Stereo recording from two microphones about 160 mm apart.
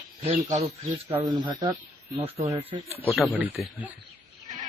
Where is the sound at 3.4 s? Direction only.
10° right (ahead or behind).